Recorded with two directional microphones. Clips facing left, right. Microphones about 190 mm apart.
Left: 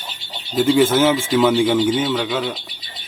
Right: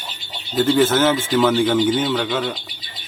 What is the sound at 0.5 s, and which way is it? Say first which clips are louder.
Speech: left 1 dB; 10° left (ahead or behind).